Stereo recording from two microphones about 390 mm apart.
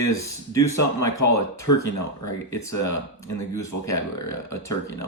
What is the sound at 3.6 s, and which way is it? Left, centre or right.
Speech, centre.